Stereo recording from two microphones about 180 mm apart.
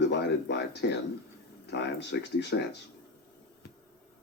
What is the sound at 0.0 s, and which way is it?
Speech, 75° left (ahead or behind).